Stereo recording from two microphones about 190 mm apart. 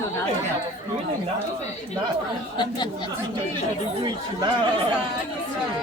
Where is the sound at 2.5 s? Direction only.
25° left (ahead or behind).